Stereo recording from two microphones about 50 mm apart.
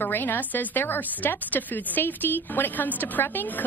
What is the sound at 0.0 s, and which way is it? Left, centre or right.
Speech, left.